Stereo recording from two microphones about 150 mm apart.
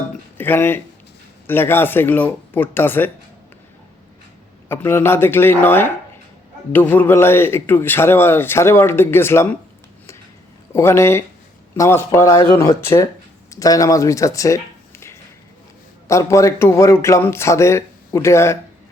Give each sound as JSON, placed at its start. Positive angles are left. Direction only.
{"t": 0.3, "sound": "speech", "side_deg": 15}
{"t": 4.7, "sound": "speech", "side_deg": 15}
{"t": 10.7, "sound": "speech", "side_deg": 15}
{"t": 16.0, "sound": "speech", "side_deg": 20}